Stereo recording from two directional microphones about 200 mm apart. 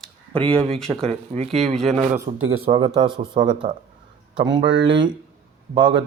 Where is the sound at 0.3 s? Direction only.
25° right (ahead or behind).